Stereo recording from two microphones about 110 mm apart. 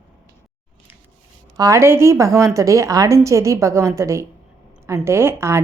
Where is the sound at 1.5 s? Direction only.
30° right (ahead or behind).